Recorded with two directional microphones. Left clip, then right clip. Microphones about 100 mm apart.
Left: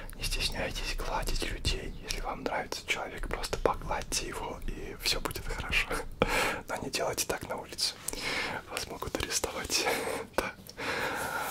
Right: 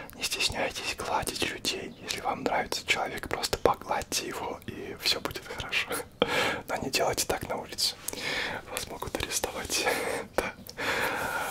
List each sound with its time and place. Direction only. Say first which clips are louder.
0.2 s whispering: right 5 dB; 50° right (ahead or behind); by 1.9 s 35° right (ahead or behind)
2.2 s speech: right 6 dB; 30° right (ahead or behind)
7.2 s speech: right 3 dB; 10° right (ahead or behind)
8.3 s speech: right 2 dB; 45° left (ahead or behind)
9.6 s speech: right 2 dB; 25° left (ahead or behind)
10.8 s a sound: right 4 dB; 5° left (ahead or behind)